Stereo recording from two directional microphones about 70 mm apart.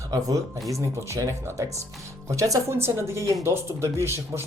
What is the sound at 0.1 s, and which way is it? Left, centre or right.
Speech, right.